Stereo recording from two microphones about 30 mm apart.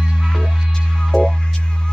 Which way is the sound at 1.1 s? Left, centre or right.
Left.